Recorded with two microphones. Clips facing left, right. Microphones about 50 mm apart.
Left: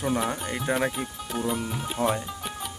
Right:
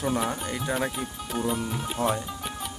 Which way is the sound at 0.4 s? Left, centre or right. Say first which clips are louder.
Left 2 dB; centre.